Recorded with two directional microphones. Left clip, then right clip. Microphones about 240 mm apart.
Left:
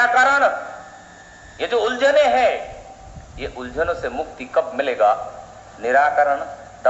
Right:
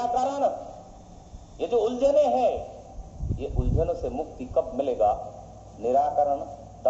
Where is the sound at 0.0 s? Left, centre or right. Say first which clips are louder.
Left 10 dB; left.